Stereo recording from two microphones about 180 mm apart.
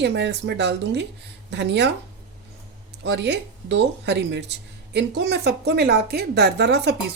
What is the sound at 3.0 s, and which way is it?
A woman's voice, 75° right (ahead or behind).